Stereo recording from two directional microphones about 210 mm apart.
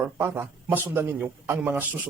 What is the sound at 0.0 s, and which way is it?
A man's voice, 10° right (ahead or behind).